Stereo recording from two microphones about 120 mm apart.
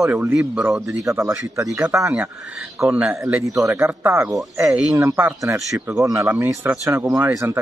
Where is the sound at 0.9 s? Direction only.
25° right (ahead or behind).